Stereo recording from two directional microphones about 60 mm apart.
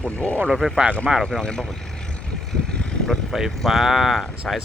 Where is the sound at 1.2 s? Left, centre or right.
Centre.